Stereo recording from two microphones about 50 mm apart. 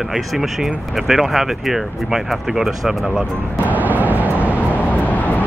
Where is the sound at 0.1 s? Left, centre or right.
Centre.